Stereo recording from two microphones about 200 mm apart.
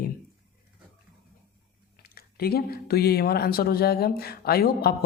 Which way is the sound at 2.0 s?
50° left (ahead or behind).